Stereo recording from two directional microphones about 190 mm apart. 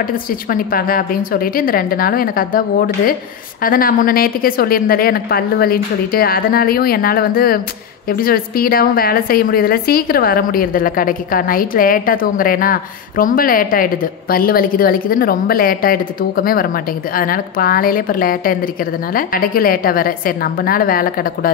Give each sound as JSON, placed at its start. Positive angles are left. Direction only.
{"t": 0.0, "sound": "a woman's voice", "side_deg": 50}
{"t": 3.6, "sound": "a woman's voice", "side_deg": 50}